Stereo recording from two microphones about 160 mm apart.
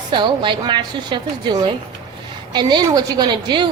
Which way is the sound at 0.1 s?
30° right (ahead or behind).